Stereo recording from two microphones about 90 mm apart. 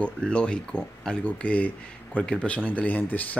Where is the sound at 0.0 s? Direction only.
10° left (ahead or behind).